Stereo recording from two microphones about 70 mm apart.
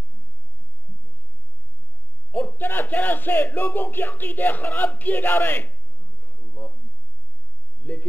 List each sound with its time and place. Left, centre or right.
2.3 s speech: left
7.8 s speech: left